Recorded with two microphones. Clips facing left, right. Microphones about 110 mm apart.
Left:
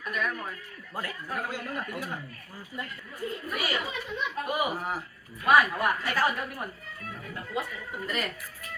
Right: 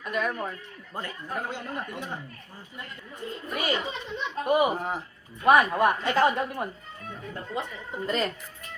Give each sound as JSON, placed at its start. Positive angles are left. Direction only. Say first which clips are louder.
{"t": 0.0, "sound": "speech", "louder": "right 3 dB", "side_deg": -25}
{"t": 3.2, "sound": "speech", "louder": "even", "side_deg": -25}